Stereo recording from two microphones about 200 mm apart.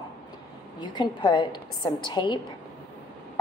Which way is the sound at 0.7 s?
20° left (ahead or behind).